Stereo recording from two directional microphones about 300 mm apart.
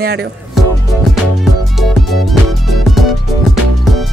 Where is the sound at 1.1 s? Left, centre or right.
Centre.